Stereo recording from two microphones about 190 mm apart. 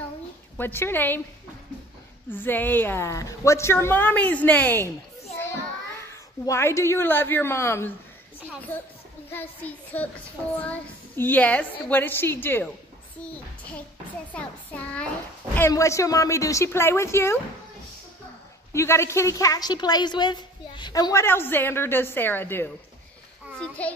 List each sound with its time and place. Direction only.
0.6 s a woman's voice: 10° left (ahead or behind)
2.3 s a woman's voice: 10° left (ahead or behind)
6.4 s a woman's voice: 15° left (ahead or behind)
14.3 s a woman's voice: 5° left (ahead or behind)
18.7 s a woman's voice: 15° left (ahead or behind)
23.8 s a woman's voice: 5° left (ahead or behind)